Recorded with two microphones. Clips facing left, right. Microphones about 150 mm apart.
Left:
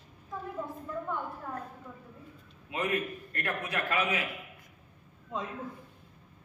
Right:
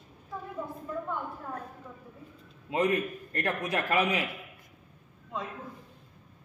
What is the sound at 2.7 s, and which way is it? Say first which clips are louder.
A man's voice: right 5 dB; 35° right (ahead or behind).